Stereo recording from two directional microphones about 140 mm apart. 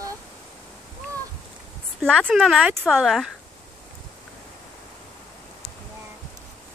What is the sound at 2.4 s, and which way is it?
Speech, 5° right (ahead or behind).